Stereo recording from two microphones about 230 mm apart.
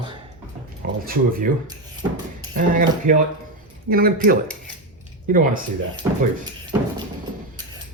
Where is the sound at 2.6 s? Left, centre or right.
Right.